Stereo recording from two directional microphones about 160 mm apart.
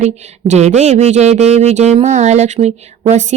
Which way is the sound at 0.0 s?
45° right (ahead or behind).